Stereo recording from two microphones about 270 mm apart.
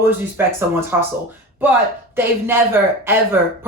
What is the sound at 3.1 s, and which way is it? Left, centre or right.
Speech, centre.